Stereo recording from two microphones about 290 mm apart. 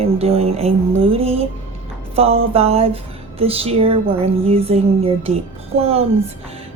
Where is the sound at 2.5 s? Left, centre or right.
Right.